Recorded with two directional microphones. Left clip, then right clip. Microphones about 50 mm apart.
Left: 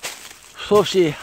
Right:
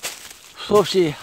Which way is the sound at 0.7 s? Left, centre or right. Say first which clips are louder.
Left 1 dB; centre.